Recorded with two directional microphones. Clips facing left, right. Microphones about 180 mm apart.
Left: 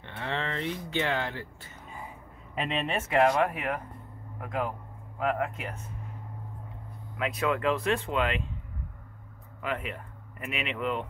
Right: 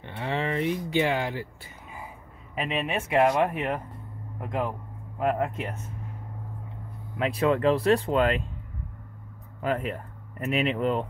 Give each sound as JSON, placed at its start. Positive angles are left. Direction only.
{"t": 0.0, "sound": "speech", "side_deg": -15}
{"t": 2.9, "sound": "speech", "side_deg": -15}
{"t": 7.2, "sound": "speech", "side_deg": -30}
{"t": 9.6, "sound": "speech", "side_deg": -40}